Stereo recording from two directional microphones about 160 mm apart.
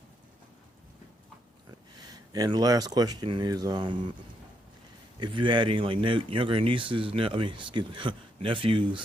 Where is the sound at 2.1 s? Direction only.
25° right (ahead or behind).